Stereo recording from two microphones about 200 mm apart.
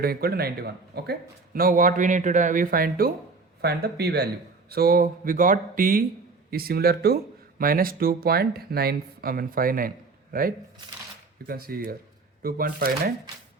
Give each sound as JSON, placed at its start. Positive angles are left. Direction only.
{"t": 0.0, "sound": "speech", "side_deg": -50}
{"t": 11.4, "sound": "speech", "side_deg": -50}